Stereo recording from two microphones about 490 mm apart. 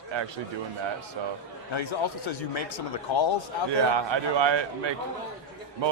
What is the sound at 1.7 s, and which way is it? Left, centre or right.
Speech, left.